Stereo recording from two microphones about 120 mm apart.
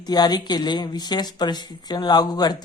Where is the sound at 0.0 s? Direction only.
35° left (ahead or behind).